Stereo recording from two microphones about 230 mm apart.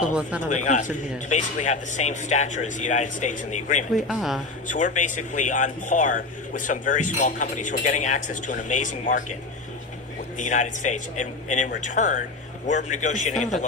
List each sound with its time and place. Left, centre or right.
0.0 s speech: centre
0.4 s speech: left
3.9 s speech: centre
4.7 s speech: left
10.3 s speech: left